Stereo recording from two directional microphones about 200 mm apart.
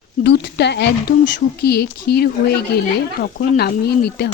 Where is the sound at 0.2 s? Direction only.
55° left (ahead or behind).